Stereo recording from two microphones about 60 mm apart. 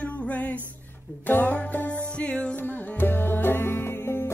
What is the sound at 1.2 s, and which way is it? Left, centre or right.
Music, left.